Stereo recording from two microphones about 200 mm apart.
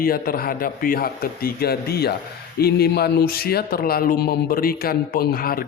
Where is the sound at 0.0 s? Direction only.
50° left (ahead or behind).